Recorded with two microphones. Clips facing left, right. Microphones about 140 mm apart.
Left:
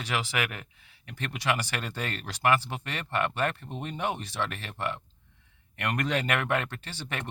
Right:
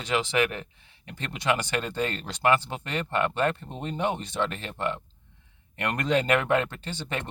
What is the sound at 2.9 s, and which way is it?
Speech, 35° right (ahead or behind).